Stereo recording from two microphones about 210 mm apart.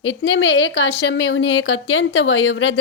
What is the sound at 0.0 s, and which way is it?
A woman's voice, 60° left (ahead or behind).